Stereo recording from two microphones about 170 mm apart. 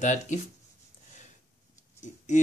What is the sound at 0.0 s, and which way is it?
Speech, 45° left (ahead or behind).